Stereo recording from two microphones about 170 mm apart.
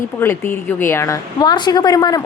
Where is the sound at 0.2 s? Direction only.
15° left (ahead or behind).